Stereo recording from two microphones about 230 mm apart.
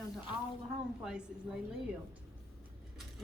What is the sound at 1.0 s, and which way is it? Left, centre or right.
Speech, centre.